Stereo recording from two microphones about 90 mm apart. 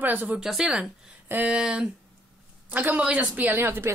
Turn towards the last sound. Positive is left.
turn(degrees=-25)  # may be behind; listen again after turning